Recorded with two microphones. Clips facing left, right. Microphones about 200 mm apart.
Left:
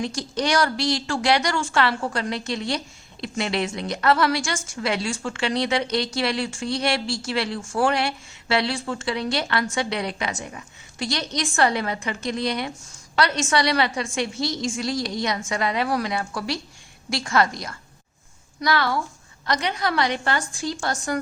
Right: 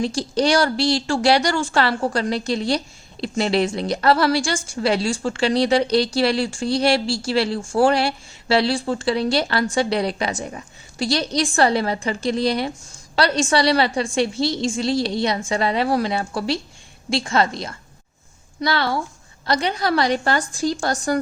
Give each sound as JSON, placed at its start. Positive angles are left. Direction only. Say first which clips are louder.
{"t": 0.0, "sound": "a woman's voice", "louder": "right 6 dB", "side_deg": -30}